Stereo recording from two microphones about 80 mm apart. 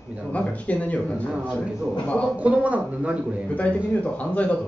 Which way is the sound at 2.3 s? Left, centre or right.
Centre.